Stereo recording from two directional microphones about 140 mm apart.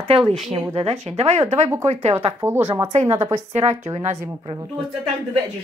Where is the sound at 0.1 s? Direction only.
45° right (ahead or behind).